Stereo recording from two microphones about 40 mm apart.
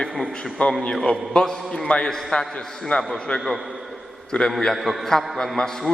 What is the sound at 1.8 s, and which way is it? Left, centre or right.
Speech, left.